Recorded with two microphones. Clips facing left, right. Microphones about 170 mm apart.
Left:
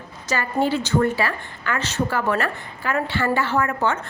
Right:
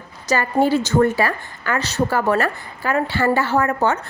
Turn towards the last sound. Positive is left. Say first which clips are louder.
# right 3 dB
turn(degrees=-40)  # may be behind; listen again after turning